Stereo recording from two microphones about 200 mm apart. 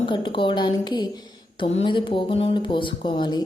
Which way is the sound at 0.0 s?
25° left (ahead or behind).